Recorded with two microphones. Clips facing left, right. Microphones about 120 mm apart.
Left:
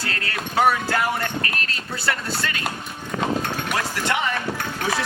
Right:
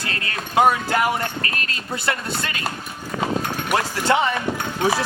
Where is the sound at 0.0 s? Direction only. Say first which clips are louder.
Even; 20° right (ahead or behind).